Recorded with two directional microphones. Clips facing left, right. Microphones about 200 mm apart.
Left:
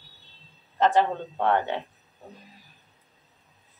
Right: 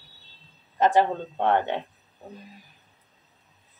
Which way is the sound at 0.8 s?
10° right (ahead or behind).